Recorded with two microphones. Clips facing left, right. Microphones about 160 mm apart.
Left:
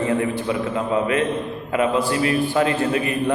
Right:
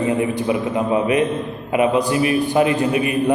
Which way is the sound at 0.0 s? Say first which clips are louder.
Right 2 dB; 15° right (ahead or behind).